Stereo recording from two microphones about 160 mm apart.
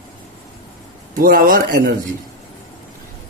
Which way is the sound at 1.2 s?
65° right (ahead or behind).